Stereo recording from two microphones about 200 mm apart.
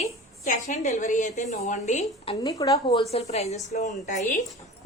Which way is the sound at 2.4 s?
15° left (ahead or behind).